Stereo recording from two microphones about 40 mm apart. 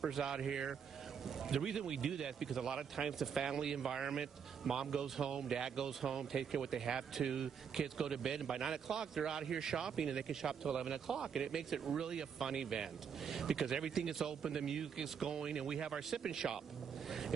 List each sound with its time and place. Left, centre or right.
0.0 s speech: centre